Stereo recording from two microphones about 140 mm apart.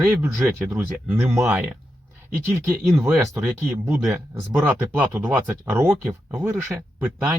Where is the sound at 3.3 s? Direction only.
20° right (ahead or behind).